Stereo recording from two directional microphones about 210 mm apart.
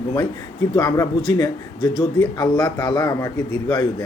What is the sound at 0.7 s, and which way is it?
A man's voice, 20° left (ahead or behind).